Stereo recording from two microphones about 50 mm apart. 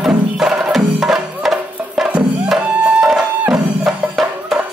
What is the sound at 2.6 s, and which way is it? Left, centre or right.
Music, right.